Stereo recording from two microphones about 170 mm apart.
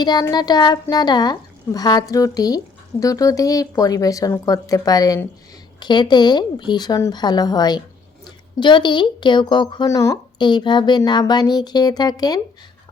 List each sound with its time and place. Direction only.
0.0 s speech: 25° left (ahead or behind)